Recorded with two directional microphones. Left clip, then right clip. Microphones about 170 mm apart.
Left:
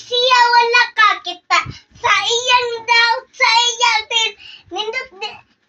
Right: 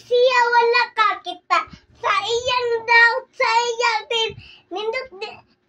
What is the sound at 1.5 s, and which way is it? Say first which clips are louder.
Child singing: left 4 dB; 45° right (ahead or behind).